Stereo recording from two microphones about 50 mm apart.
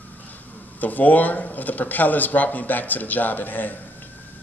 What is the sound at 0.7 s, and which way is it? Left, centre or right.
A man's voice, left.